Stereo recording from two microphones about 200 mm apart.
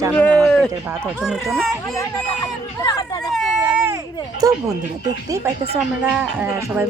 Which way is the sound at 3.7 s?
10° right (ahead or behind).